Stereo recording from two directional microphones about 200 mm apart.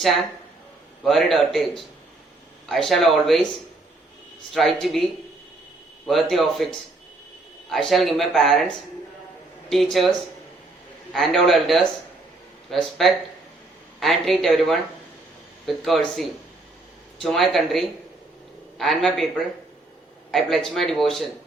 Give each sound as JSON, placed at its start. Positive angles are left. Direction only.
{"t": 1.0, "sound": "speech", "side_deg": 0}
{"t": 4.5, "sound": "speech", "side_deg": 0}
{"t": 6.1, "sound": "speech", "side_deg": 0}
{"t": 17.2, "sound": "speech", "side_deg": 0}
{"t": 20.3, "sound": "speech", "side_deg": 0}